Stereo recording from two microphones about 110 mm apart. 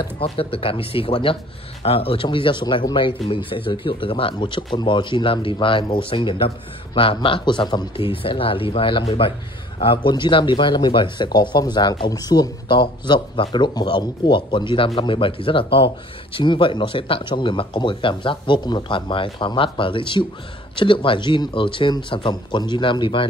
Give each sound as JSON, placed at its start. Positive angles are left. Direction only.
{"t": 0.2, "sound": "speech", "side_deg": 60}
{"t": 8.0, "sound": "speech", "side_deg": 55}